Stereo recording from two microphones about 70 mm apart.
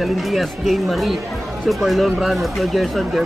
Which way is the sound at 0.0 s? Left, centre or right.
Centre.